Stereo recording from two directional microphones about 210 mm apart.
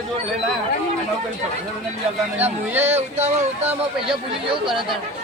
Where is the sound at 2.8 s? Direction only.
30° right (ahead or behind).